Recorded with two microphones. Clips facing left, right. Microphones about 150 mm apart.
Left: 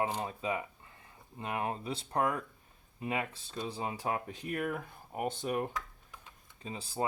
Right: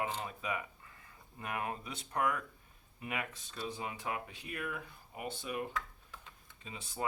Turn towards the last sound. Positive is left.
turn(degrees=35)  # may be behind; listen again after turning